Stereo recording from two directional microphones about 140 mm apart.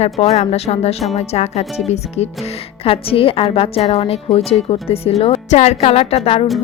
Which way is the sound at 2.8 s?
40° left (ahead or behind).